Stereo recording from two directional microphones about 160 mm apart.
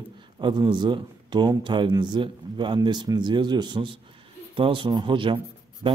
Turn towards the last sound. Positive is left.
turn(degrees=-30)  # may be behind; listen again after turning